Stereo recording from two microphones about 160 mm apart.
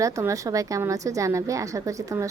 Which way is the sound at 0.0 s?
20° right (ahead or behind).